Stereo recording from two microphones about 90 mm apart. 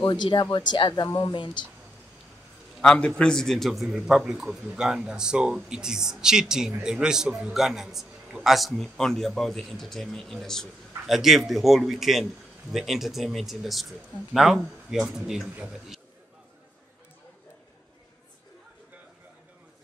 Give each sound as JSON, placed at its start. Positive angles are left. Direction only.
{"t": 0.0, "sound": "speech", "side_deg": 60}
{"t": 2.8, "sound": "a man's voice", "side_deg": 5}
{"t": 15.4, "sound": "a man's voice", "side_deg": -20}